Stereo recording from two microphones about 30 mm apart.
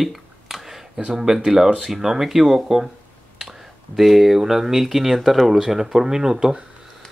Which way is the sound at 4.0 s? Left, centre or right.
Centre.